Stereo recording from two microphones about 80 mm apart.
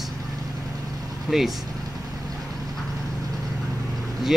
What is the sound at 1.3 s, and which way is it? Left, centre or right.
Speech, centre.